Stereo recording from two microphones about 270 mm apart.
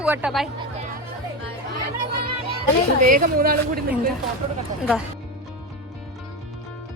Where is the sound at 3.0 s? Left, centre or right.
Right.